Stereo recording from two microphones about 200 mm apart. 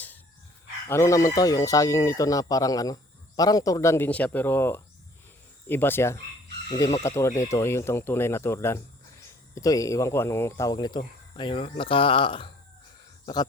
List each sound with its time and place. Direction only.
0.9 s speech: 15° left (ahead or behind)